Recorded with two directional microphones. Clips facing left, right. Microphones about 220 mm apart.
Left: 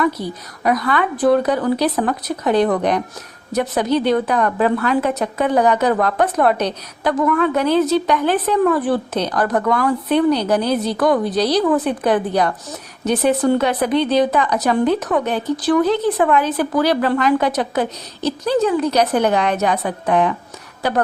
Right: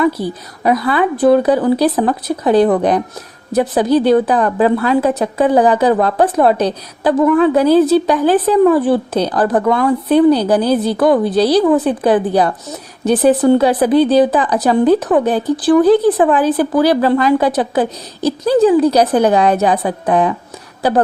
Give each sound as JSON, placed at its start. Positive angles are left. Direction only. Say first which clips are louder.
{"t": 0.0, "sound": "a woman's voice", "louder": "right 4 dB", "side_deg": -30}